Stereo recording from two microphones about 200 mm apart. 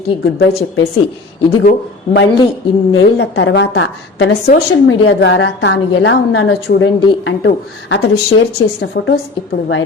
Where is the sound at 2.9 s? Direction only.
65° left (ahead or behind).